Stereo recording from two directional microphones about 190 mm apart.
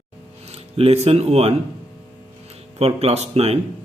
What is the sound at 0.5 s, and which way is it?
Speech, 30° right (ahead or behind).